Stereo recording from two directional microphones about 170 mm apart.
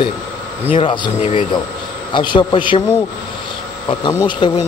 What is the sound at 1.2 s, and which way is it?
Speech, 40° left (ahead or behind).